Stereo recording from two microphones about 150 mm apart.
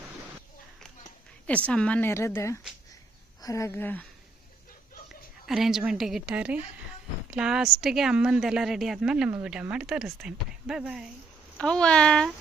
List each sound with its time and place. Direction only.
1.6 s a woman's voice: 5° left (ahead or behind)
5.5 s a woman's voice: centre (ahead or behind)